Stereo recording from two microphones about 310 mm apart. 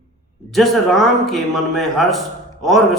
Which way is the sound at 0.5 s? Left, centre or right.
Centre.